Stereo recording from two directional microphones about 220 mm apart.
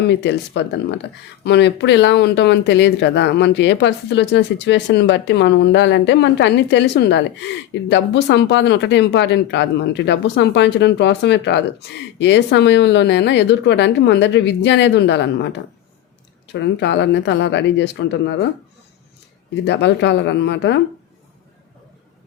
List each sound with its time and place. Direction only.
0.1 s speech: 50° left (ahead or behind)
19.6 s speech: 55° left (ahead or behind)